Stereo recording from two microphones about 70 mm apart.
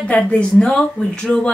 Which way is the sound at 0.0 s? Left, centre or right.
Centre.